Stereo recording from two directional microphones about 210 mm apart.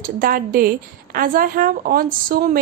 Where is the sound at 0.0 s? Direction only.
40° right (ahead or behind).